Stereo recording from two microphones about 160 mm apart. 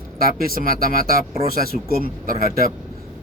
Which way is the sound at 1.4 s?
70° left (ahead or behind).